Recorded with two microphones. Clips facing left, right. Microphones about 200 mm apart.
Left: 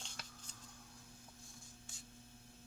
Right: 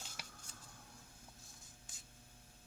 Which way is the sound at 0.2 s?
10° right (ahead or behind).